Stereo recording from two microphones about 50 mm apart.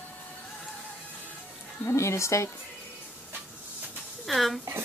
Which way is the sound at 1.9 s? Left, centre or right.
Left.